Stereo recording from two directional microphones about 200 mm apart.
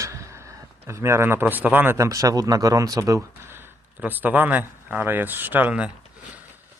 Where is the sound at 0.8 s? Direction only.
15° right (ahead or behind).